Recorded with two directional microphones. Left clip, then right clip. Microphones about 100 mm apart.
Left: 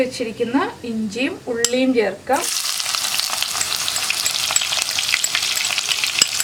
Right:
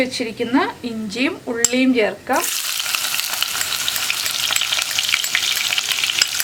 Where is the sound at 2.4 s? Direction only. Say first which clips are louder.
Even; 5° left (ahead or behind).